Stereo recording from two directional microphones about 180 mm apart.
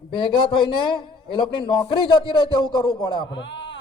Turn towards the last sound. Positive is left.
turn(degrees=85)